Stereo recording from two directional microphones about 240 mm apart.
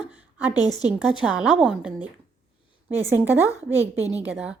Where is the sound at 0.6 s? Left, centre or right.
Centre.